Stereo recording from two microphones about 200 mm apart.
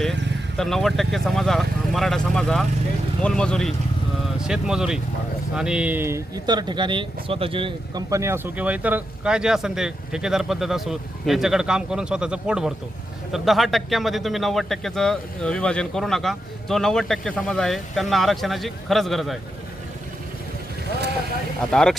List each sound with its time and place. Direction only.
0.0 s speech: centre (ahead or behind); by 8.0 s 25° right (ahead or behind)
8.1 s speech: 15° right (ahead or behind)
21.6 s speech: 5° left (ahead or behind)